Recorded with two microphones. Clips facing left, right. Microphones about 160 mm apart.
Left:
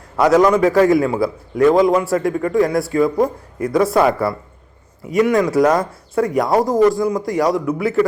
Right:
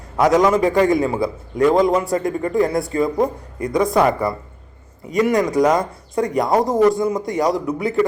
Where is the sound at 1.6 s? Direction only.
Centre (ahead or behind).